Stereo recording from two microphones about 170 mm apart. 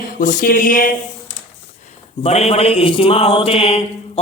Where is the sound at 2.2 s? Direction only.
35° left (ahead or behind).